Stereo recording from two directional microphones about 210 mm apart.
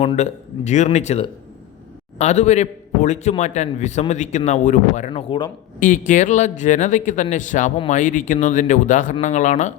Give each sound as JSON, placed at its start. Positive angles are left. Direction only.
{"t": 0.0, "sound": "a man's voice", "side_deg": 30}
{"t": 6.1, "sound": "a man's voice", "side_deg": 35}